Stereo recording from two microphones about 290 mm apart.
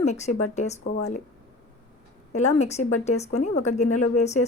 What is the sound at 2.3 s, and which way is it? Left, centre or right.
Speech, left.